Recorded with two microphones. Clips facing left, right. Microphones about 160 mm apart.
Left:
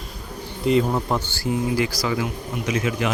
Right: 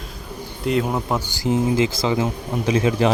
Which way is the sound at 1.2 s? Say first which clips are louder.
Right 4 dB; 20° right (ahead or behind).